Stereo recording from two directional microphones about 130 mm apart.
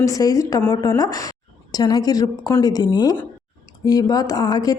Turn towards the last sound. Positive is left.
turn(degrees=30)  # may be behind; listen again after turning